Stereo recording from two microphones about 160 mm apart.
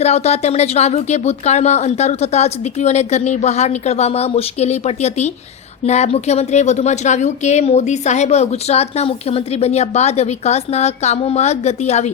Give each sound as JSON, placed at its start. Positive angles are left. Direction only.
{"t": 0.0, "sound": "a woman's voice", "side_deg": 40}